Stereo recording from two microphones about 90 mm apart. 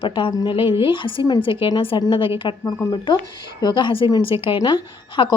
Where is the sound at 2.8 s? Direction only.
60° left (ahead or behind).